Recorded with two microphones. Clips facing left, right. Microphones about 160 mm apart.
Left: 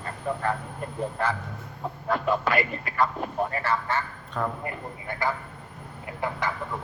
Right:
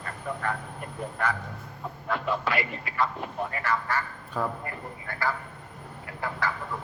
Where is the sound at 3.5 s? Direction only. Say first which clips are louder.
Left 2 dB; 30° left (ahead or behind).